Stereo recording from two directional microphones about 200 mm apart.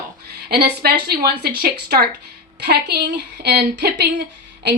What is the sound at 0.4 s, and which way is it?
A woman's voice, 50° right (ahead or behind).